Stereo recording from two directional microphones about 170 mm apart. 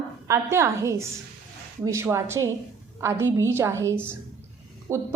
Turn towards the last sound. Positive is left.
turn(degrees=-15)  # may be behind; listen again after turning